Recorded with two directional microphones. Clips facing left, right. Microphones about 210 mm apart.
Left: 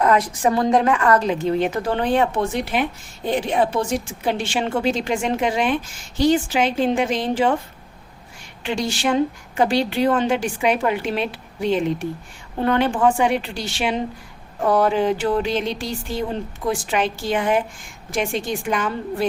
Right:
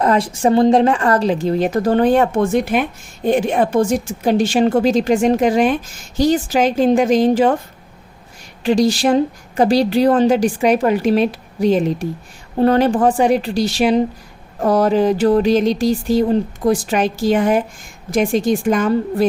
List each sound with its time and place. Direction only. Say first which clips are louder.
0.0 s a woman's voice: right 3 dB; 30° right (ahead or behind)
8.6 s a woman's voice: right 8 dB; 35° right (ahead or behind)